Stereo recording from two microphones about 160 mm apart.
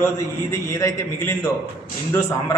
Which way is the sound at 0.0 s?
20° left (ahead or behind).